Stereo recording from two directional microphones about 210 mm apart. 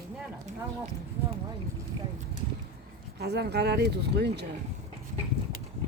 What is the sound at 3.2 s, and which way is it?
Speech, 50° right (ahead or behind).